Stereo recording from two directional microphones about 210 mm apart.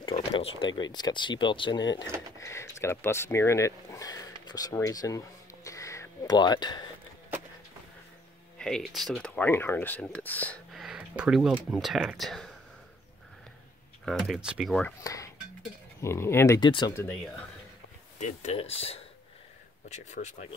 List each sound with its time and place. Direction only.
0.0 s speech: 25° left (ahead or behind)
8.5 s speech: 5° left (ahead or behind)
14.0 s speech: centre (ahead or behind)
16.0 s speech: 10° left (ahead or behind)
18.2 s speech: 30° left (ahead or behind)